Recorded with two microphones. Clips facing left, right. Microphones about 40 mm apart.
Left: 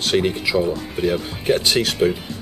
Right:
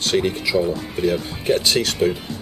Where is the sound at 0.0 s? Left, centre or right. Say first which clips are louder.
Left 1 dB; centre.